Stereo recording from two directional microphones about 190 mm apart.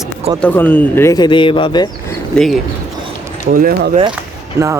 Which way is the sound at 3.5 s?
50° right (ahead or behind).